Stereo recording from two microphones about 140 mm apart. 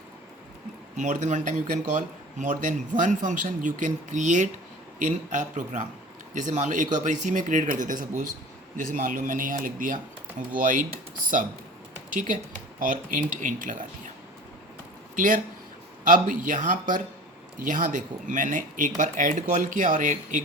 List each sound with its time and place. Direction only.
0.9 s a man's voice: 60° right (ahead or behind)
12.8 s speech: 70° right (ahead or behind)
15.1 s speech: 70° right (ahead or behind)